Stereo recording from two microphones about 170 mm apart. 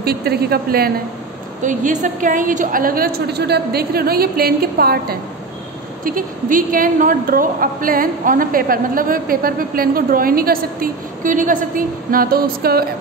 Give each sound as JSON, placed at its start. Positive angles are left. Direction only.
{"t": 0.0, "sound": "a woman's voice", "side_deg": -65}
{"t": 1.6, "sound": "a woman's voice", "side_deg": -50}